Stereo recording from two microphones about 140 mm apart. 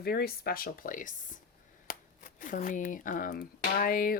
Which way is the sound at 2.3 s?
70° left (ahead or behind).